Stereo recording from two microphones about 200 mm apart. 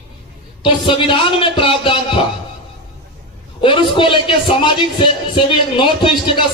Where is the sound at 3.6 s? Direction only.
25° left (ahead or behind).